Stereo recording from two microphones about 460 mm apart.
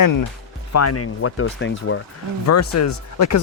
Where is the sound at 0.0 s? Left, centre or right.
Left.